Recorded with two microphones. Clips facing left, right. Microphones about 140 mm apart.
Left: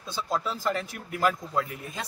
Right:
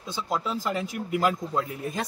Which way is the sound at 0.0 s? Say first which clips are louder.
Right 1 dB; 15° right (ahead or behind).